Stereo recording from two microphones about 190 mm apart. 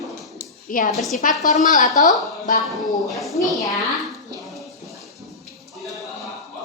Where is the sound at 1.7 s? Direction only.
40° left (ahead or behind).